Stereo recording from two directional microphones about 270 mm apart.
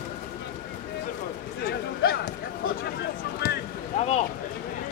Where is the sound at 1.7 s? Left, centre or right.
Left.